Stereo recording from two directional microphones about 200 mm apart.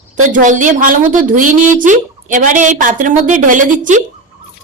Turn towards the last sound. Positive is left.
turn(degrees=-40)  # may be behind; listen again after turning